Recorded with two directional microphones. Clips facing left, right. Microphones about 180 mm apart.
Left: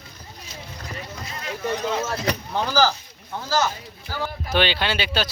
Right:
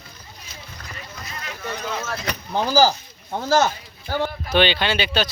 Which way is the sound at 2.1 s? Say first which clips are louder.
Left 3 dB; 30° left (ahead or behind).